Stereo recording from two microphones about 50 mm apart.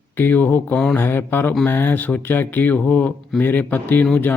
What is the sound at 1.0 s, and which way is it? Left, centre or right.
Speech, left.